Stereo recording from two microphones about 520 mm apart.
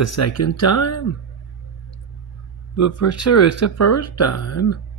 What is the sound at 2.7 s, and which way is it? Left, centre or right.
Speech, left.